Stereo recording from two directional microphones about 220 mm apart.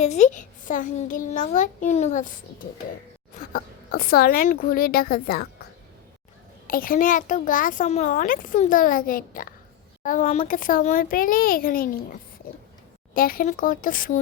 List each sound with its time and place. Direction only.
0.0 s a child's voice: 30° left (ahead or behind)
3.5 s a child's voice: 40° left (ahead or behind)
6.7 s a child's voice: 40° left (ahead or behind)
13.1 s a child's voice: 40° left (ahead or behind)